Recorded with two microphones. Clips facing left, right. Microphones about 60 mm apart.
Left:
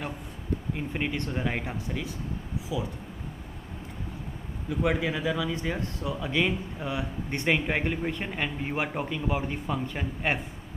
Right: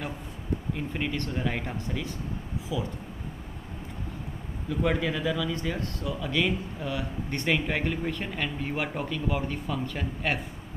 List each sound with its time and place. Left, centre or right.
0.7 s speech: centre
4.6 s speech: centre